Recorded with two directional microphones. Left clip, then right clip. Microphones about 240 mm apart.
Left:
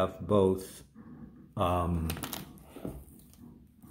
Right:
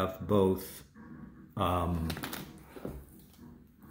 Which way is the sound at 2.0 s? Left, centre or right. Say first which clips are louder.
Even; left.